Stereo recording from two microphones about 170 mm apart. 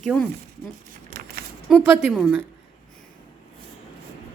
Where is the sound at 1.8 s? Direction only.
10° right (ahead or behind).